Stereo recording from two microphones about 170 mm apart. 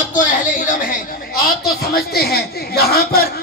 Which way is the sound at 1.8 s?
65° left (ahead or behind).